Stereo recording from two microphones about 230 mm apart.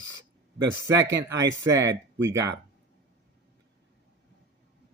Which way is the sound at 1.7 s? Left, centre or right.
Centre.